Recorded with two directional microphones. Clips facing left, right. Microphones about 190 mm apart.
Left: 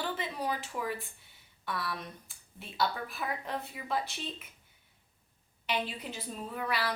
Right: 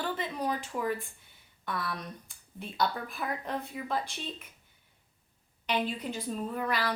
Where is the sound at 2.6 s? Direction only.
5° left (ahead or behind).